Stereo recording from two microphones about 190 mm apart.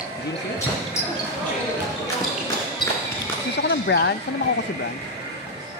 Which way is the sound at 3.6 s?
65° left (ahead or behind).